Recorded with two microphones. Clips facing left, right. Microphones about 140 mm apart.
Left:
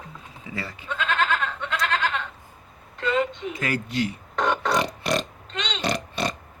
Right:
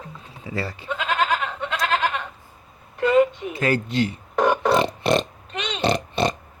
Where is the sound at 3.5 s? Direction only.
30° right (ahead or behind).